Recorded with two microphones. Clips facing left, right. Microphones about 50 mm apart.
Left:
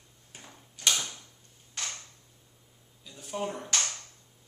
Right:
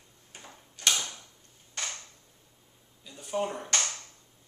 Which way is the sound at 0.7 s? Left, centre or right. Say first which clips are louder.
Even; centre.